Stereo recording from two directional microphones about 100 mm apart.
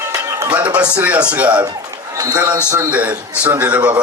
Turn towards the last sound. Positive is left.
turn(degrees=-15)  # may be behind; listen again after turning